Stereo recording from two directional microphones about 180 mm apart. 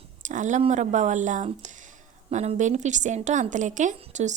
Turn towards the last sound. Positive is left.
turn(degrees=-40)  # may be behind; listen again after turning